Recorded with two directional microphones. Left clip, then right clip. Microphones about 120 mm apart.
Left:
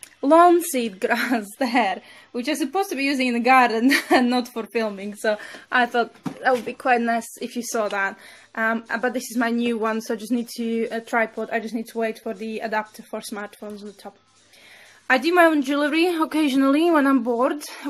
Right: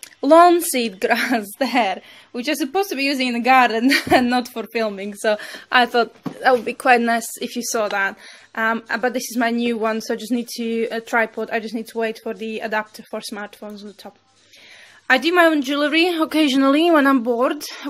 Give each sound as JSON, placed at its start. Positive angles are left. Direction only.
{"t": 0.2, "sound": "a woman's voice", "side_deg": -20}
{"t": 15.0, "sound": "a woman's voice", "side_deg": -10}